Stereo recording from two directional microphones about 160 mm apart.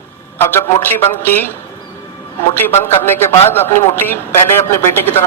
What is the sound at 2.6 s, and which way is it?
A man's voice, 15° left (ahead or behind).